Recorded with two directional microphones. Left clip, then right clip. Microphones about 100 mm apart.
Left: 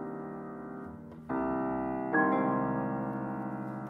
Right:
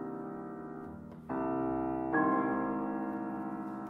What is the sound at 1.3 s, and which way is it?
Keyboard, 30° left (ahead or behind).